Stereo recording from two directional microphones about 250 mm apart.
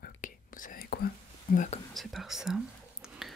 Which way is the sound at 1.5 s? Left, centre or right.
Left.